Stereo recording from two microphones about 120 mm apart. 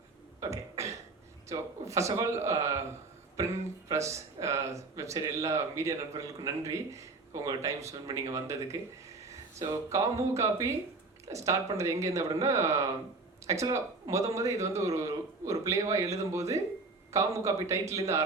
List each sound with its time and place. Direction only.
0.3 s cough: 25° right (ahead or behind)
1.5 s speech: 25° right (ahead or behind)